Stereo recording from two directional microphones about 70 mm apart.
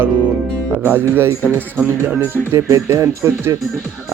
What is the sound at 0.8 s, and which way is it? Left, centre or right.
Speech, right.